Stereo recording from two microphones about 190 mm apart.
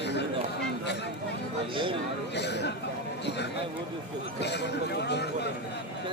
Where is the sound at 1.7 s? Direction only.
25° right (ahead or behind).